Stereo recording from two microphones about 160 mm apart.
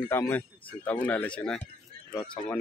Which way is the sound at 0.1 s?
15° left (ahead or behind).